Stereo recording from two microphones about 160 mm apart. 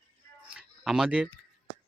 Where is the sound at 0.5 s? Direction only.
5° right (ahead or behind).